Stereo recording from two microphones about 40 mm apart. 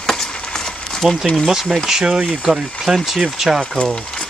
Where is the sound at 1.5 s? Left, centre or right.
Centre.